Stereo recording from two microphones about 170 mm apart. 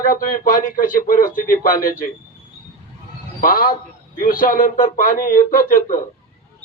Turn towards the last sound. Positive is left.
turn(degrees=50)  # may be behind; listen again after turning